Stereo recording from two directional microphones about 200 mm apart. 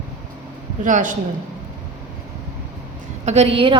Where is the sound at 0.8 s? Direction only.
40° right (ahead or behind).